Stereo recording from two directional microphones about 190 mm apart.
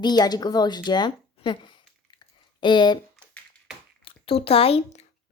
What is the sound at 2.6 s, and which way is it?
Speech, 25° left (ahead or behind).